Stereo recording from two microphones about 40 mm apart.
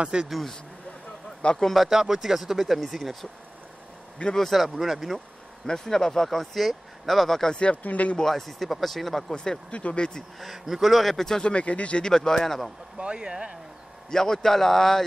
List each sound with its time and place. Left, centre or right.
0.0 s speech: right
1.6 s speech: centre
1.9 s speech: centre
4.4 s speech: centre
5.7 s speech: centre
7.7 s speech: left
8.2 s speech: centre
9.3 s speech: centre
9.7 s speech: left
10.4 s speech: centre
11.4 s speech: left
12.0 s speech: centre
12.9 s speech: right
14.1 s speech: centre